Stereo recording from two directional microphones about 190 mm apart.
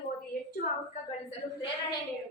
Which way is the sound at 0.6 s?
50° left (ahead or behind).